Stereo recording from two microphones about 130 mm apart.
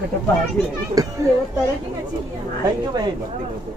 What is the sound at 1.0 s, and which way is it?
Speech, 30° right (ahead or behind).